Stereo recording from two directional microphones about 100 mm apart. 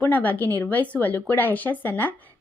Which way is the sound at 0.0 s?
20° left (ahead or behind).